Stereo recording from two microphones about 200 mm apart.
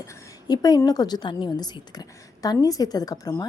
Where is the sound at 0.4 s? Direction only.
20° left (ahead or behind).